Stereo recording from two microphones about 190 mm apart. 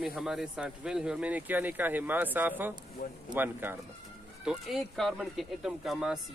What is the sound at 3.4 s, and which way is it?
Speech, 10° right (ahead or behind).